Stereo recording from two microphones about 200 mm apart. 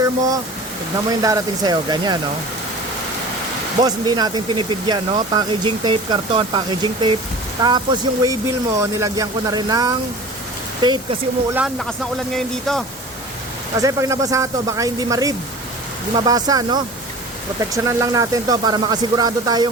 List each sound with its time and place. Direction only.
1.2 s speech: 20° right (ahead or behind)
3.8 s speech: 20° right (ahead or behind)
11.5 s speech: centre (ahead or behind)
13.7 s speech: 15° right (ahead or behind)